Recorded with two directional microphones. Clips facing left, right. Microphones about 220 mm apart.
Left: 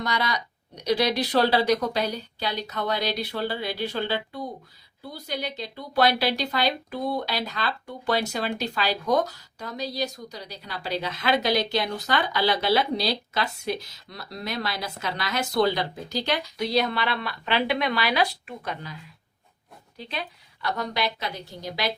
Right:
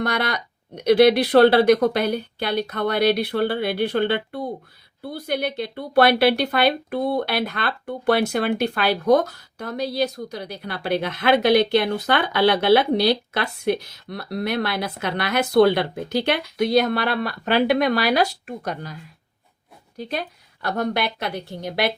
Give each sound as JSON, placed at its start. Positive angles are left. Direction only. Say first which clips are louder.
{"t": 0.0, "sound": "speech", "louder": "right 4 dB", "side_deg": -60}
{"t": 20.0, "sound": "a woman's voice", "louder": "right 6 dB", "side_deg": -45}